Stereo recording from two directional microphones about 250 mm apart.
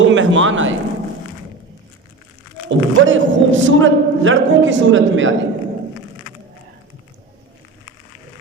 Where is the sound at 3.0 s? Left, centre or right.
Right.